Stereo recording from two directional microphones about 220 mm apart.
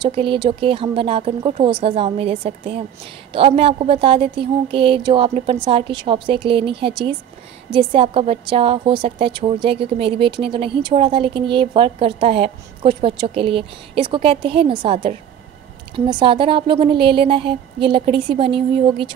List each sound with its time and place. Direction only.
0.0 s a woman's voice: 25° right (ahead or behind)